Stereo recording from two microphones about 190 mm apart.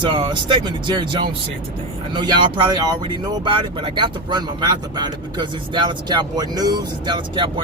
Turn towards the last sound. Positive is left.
turn(degrees=-25)  # may be behind; listen again after turning